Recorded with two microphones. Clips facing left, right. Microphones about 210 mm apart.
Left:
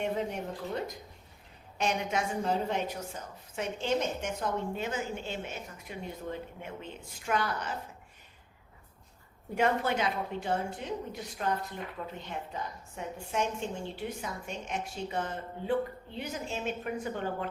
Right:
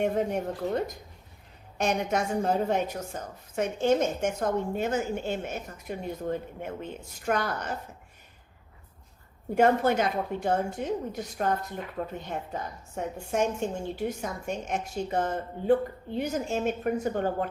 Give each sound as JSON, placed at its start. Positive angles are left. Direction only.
{"t": 0.0, "sound": "a woman's voice", "side_deg": -50}
{"t": 9.6, "sound": "a woman's voice", "side_deg": -45}